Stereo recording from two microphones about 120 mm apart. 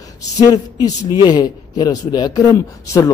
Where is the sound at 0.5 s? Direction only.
30° left (ahead or behind).